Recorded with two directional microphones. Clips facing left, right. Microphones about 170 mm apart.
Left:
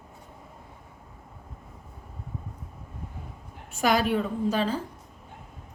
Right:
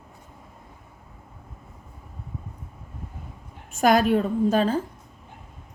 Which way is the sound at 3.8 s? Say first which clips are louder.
Right 5 dB; 50° right (ahead or behind).